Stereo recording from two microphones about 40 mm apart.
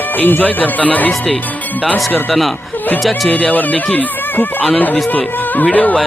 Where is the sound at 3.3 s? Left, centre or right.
Left.